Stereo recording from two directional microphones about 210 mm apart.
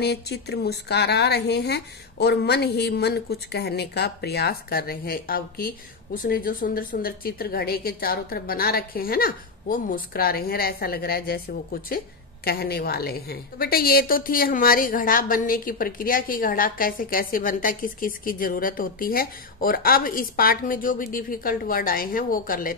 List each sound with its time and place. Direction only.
0.0 s a woman's voice: 50° left (ahead or behind)